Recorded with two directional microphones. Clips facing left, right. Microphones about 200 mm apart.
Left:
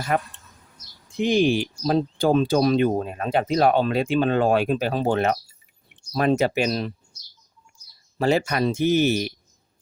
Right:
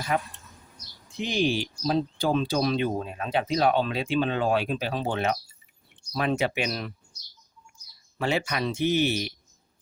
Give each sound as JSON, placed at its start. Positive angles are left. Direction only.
{"t": 0.1, "sound": "speech", "side_deg": 50}
{"t": 8.2, "sound": "speech", "side_deg": 40}